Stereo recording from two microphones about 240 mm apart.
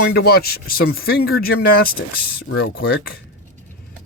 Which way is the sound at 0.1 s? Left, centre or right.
Left.